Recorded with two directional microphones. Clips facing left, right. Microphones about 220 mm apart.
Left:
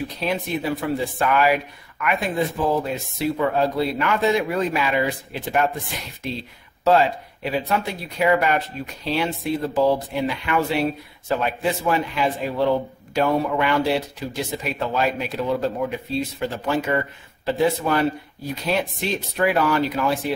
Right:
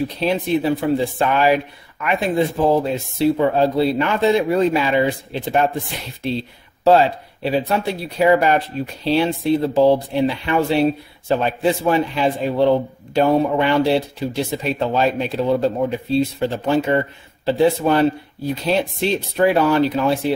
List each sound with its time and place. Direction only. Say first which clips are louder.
0.2 s speech: right 6 dB; 30° right (ahead or behind)